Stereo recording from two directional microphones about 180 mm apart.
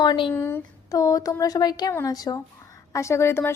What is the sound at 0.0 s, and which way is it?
Speech, 25° left (ahead or behind).